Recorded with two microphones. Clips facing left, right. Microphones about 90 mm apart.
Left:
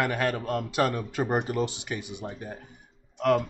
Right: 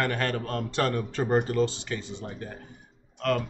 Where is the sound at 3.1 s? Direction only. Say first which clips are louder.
Left 4 dB; 15° left (ahead or behind).